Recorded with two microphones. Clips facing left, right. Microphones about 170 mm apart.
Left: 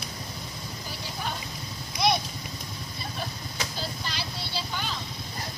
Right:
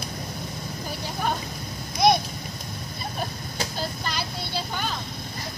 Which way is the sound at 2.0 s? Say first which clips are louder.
Right 6 dB; 45° right (ahead or behind).